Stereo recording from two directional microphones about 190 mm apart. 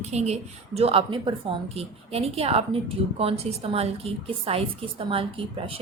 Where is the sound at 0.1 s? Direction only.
35° right (ahead or behind).